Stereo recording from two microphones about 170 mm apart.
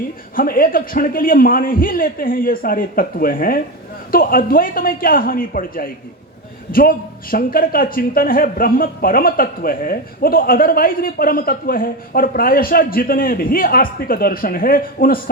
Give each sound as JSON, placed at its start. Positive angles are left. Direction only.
{"t": 0.3, "sound": "a man's voice", "side_deg": 55}